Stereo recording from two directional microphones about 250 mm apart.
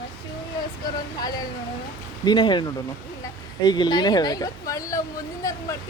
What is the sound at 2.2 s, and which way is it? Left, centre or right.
Speech, centre.